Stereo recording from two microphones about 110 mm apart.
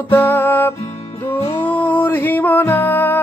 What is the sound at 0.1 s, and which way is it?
Music, 15° left (ahead or behind).